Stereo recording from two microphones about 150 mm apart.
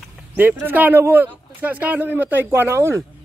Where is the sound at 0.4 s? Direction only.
15° right (ahead or behind).